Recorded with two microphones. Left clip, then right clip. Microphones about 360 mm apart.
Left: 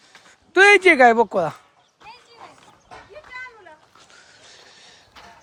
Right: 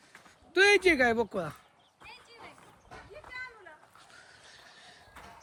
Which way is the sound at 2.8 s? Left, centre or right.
Left.